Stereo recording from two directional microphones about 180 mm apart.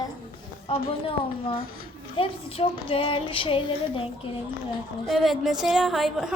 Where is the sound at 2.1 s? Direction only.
30° left (ahead or behind).